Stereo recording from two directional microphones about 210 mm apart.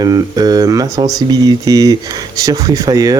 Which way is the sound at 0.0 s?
20° right (ahead or behind).